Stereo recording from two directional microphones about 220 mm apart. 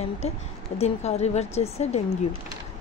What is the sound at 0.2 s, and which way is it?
Speech, 30° left (ahead or behind).